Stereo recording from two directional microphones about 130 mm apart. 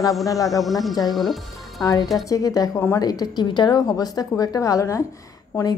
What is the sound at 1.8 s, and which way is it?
A woman's voice, 30° left (ahead or behind).